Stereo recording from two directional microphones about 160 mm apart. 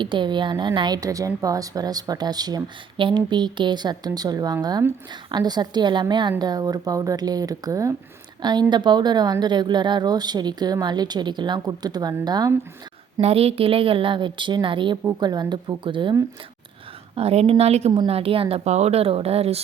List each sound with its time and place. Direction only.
0.0 s a woman's voice: 30° right (ahead or behind)
13.2 s a woman's voice: 40° right (ahead or behind)
17.2 s a woman's voice: 40° right (ahead or behind)